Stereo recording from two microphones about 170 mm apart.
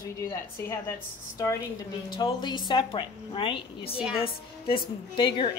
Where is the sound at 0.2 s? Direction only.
15° left (ahead or behind).